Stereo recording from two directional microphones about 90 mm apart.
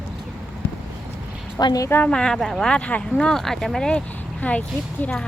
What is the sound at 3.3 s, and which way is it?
Speech, 5° left (ahead or behind).